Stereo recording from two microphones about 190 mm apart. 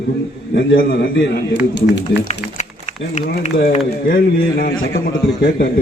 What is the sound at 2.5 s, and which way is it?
A man's voice, 40° left (ahead or behind).